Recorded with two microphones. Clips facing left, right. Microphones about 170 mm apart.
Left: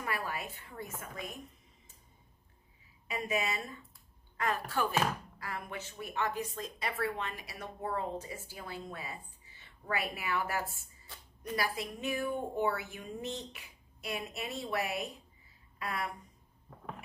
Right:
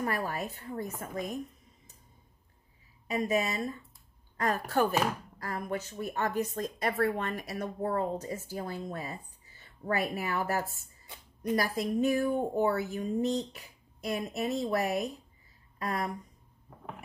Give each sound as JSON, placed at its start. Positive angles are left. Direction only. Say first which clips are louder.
{"t": 0.0, "sound": "speech", "louder": "right 5 dB", "side_deg": -45}
{"t": 3.3, "sound": "speech", "louder": "right 3 dB", "side_deg": -40}